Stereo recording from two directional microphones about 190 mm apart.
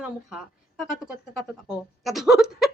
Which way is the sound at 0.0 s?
5° right (ahead or behind).